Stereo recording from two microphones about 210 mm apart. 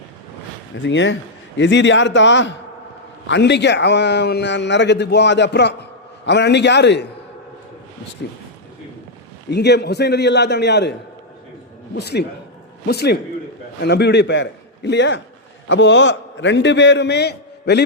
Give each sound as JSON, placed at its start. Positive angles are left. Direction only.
{"t": 0.8, "sound": "a man's voice", "side_deg": 60}
{"t": 9.5, "sound": "a man's voice", "side_deg": 55}
{"t": 11.9, "sound": "a man's voice", "side_deg": 55}